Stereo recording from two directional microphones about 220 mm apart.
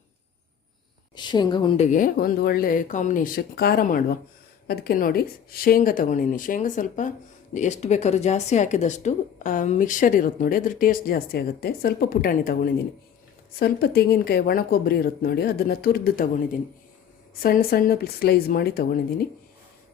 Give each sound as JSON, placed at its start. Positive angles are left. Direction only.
{"t": 1.1, "sound": "speech", "side_deg": 20}
{"t": 13.6, "sound": "speech", "side_deg": 45}